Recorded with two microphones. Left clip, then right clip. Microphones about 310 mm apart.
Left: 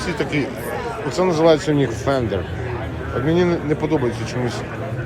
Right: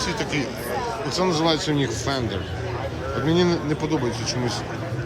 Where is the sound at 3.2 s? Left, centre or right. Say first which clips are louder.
Left 3 dB; centre.